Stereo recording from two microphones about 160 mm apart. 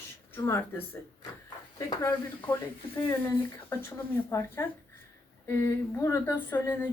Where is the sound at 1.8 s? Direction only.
20° left (ahead or behind).